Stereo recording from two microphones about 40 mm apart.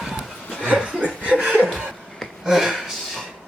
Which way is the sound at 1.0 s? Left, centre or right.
Right.